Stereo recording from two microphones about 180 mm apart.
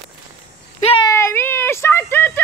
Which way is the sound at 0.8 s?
35° left (ahead or behind).